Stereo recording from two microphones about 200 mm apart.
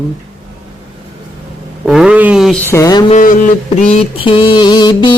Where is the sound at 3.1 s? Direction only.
40° left (ahead or behind).